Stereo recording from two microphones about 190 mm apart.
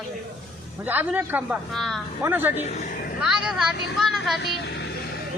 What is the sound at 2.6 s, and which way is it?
Speech, 40° left (ahead or behind).